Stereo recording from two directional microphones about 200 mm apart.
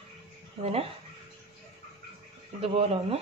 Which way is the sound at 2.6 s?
30° right (ahead or behind).